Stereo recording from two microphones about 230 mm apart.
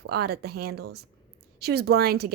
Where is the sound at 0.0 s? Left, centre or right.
Right.